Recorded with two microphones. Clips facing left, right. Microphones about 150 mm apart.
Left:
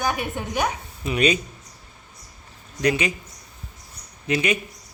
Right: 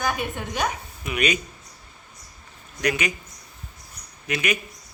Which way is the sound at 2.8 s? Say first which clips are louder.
Left 3 dB; 30° left (ahead or behind).